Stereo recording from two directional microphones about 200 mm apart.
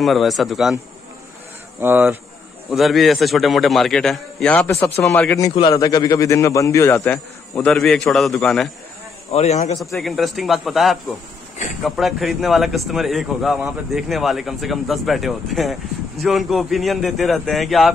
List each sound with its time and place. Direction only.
0.0 s a man's voice: centre (ahead or behind)
1.8 s speech: 10° right (ahead or behind)
2.7 s a man's voice: centre (ahead or behind)
5.5 s a man's voice: 25° left (ahead or behind); by 8.6 s centre (ahead or behind)
9.3 s a man's voice: 35° left (ahead or behind)
9.9 s a man's voice: centre (ahead or behind)